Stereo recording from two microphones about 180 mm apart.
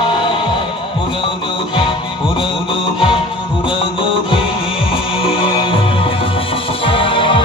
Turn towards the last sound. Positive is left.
turn(degrees=30)  # may be behind; listen again after turning